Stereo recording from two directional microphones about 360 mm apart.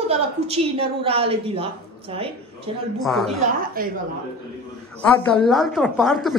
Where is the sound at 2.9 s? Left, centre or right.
Centre.